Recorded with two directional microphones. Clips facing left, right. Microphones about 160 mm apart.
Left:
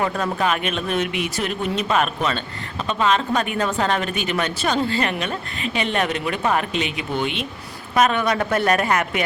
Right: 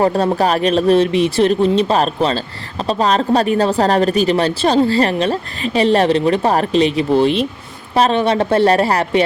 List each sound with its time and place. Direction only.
0.0 s speech: 35° right (ahead or behind)